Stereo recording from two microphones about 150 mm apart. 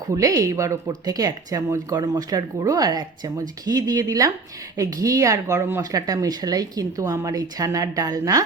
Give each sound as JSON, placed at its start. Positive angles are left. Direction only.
{"t": 0.1, "sound": "speech", "side_deg": -20}